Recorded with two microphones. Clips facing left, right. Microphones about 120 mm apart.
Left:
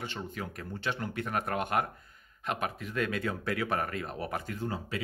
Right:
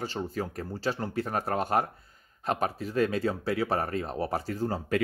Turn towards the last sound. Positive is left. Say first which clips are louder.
# right 5 dB
turn(degrees=-35)  # may be behind; listen again after turning